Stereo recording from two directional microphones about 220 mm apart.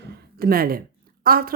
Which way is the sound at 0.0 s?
45° right (ahead or behind).